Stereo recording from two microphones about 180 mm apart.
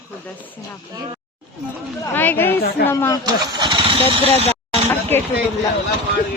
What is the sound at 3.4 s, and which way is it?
Speech, 25° right (ahead or behind).